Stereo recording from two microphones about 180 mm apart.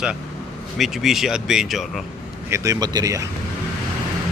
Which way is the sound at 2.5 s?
15° right (ahead or behind).